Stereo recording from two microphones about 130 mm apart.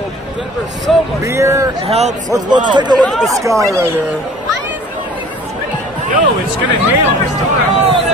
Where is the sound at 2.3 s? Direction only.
35° right (ahead or behind).